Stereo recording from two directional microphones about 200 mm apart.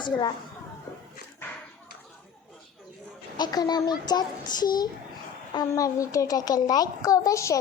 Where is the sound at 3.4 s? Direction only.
20° left (ahead or behind).